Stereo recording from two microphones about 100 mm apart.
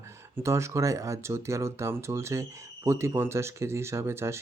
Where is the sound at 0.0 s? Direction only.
30° right (ahead or behind).